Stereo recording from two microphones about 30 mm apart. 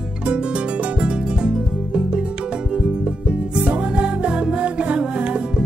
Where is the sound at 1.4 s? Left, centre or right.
Right.